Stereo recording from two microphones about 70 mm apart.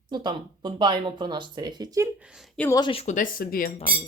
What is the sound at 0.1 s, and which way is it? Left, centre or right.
Speech, right.